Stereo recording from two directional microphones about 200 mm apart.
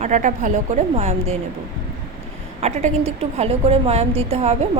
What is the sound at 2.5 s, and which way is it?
A woman's voice, 35° right (ahead or behind).